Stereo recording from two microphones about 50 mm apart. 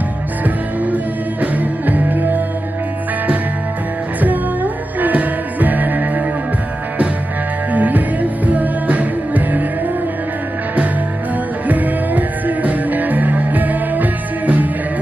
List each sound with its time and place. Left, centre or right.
0.8 s music: right
5.0 s music: right
7.7 s music: right
11.6 s music: right